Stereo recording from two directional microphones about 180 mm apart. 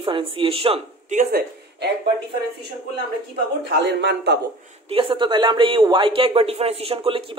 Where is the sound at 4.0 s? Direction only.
80° right.